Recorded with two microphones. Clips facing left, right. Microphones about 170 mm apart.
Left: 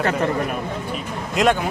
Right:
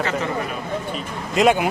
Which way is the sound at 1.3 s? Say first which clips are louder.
Right 2 dB; centre (ahead or behind).